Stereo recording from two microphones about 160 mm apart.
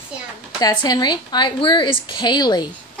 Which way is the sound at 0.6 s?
25° left (ahead or behind).